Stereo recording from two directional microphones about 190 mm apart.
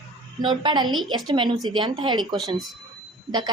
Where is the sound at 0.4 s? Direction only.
25° right (ahead or behind).